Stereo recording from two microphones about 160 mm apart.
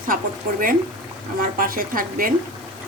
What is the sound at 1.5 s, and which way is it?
Speech, 65° right (ahead or behind).